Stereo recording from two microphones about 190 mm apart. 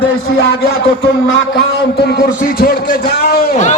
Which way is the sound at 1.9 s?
60° left (ahead or behind).